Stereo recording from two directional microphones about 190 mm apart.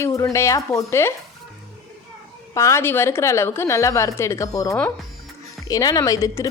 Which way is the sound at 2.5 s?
15° left (ahead or behind).